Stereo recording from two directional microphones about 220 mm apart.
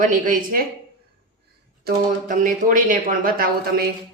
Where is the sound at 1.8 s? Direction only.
35° right (ahead or behind).